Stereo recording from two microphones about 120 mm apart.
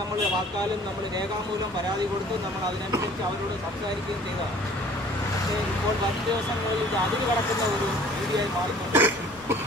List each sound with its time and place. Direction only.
8.9 s cough: 15° right (ahead or behind)